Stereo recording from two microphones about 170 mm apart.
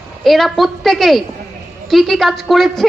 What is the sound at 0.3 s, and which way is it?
A woman's voice, centre (ahead or behind).